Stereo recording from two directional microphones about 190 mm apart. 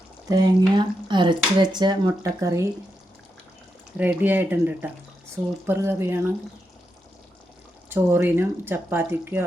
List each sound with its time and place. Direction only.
0.3 s speech: 20° right (ahead or behind)
3.9 s speech: 10° right (ahead or behind)
7.9 s speech: 10° right (ahead or behind)